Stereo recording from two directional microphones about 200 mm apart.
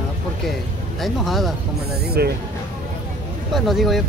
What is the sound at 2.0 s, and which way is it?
Speech, 55° right (ahead or behind).